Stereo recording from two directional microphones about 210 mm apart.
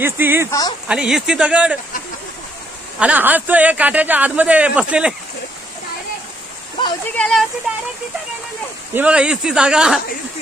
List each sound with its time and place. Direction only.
0.0 s a man's voice: 10° right (ahead or behind)
0.5 s speech: 20° left (ahead or behind)
0.8 s speech: 5° right (ahead or behind)
3.0 s a man's voice: 5° right (ahead or behind)
7.2 s speech: 5° left (ahead or behind)
8.9 s speech: 5° right (ahead or behind)